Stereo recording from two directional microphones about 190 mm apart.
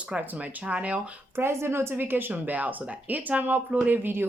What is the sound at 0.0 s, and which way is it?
Speech, 10° right (ahead or behind).